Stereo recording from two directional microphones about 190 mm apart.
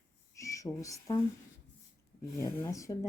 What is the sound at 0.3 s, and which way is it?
Speech, 15° left (ahead or behind).